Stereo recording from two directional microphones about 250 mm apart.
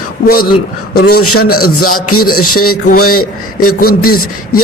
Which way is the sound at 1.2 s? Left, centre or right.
Left.